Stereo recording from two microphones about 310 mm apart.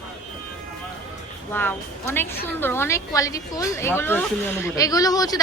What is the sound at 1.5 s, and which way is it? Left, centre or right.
A woman's voice, centre.